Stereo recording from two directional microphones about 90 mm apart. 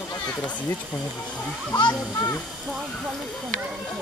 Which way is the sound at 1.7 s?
55° left (ahead or behind).